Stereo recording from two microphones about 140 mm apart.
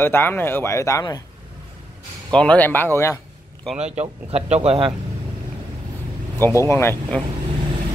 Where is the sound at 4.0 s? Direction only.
50° right (ahead or behind).